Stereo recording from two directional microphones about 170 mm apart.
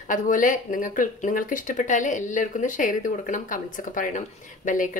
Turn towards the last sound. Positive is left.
turn(degrees=50)  # may be behind; listen again after turning